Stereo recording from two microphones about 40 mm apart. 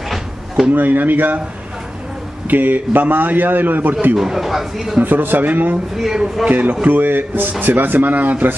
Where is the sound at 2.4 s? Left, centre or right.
Right.